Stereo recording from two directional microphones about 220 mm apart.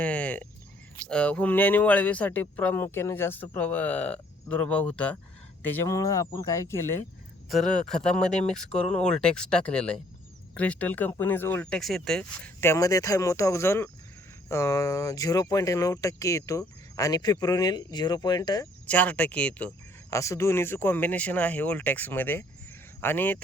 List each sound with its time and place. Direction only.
0.0 s a sound: 5° left (ahead or behind)
1.0 s speech: 5° left (ahead or behind)
18.9 s speech: 5° left (ahead or behind)